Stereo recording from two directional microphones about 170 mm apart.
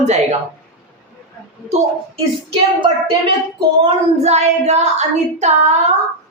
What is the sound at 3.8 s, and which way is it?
Child singing, 40° right (ahead or behind).